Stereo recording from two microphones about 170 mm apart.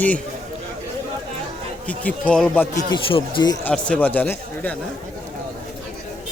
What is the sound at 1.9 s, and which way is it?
Speech, 10° left (ahead or behind).